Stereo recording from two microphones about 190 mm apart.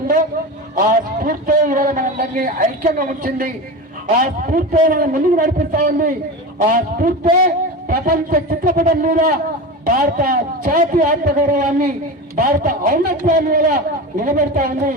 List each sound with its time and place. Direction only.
0.8 s a man's voice: 45° right (ahead or behind)
4.9 s a man's voice: 45° right (ahead or behind)